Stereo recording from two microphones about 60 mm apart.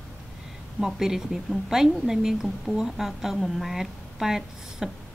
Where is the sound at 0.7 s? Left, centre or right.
Centre.